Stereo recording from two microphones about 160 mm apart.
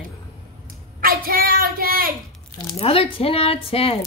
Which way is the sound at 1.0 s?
65° right (ahead or behind).